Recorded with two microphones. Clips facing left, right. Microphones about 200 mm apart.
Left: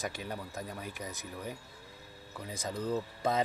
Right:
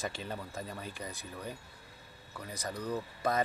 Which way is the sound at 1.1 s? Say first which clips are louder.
Left 1 dB; 20° left (ahead or behind).